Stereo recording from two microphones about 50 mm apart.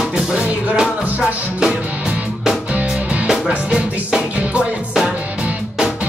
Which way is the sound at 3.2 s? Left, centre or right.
Centre.